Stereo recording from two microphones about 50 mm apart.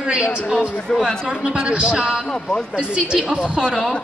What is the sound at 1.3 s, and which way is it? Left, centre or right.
A woman's voice, centre.